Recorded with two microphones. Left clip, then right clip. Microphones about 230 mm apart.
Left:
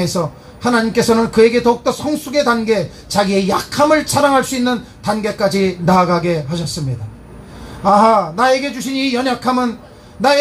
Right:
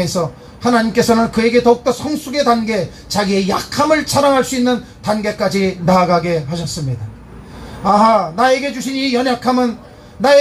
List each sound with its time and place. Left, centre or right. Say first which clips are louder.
0.0 s a man's voice: right 1 dB; left
7.8 s a man's voice: left 1 dB; left